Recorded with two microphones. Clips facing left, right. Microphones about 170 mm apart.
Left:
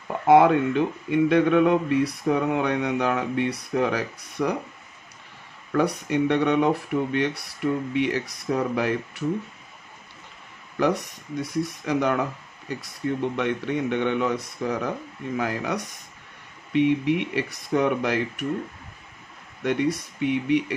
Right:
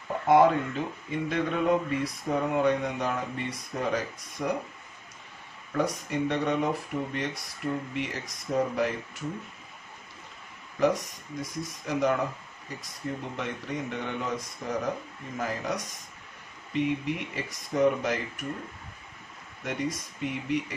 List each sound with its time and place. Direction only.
0.3 s speech: 75° left (ahead or behind)
5.7 s speech: 70° left (ahead or behind)
10.8 s speech: 70° left (ahead or behind)
13.4 s speech: 70° left (ahead or behind)
19.6 s speech: 70° left (ahead or behind)